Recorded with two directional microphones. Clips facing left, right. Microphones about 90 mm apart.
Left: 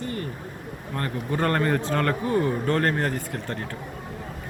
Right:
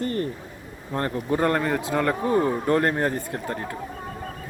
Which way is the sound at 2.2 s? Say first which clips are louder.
Right 2 dB; 25° right (ahead or behind).